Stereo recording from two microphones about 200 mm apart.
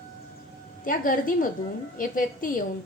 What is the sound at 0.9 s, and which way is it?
A woman's voice, 45° left (ahead or behind).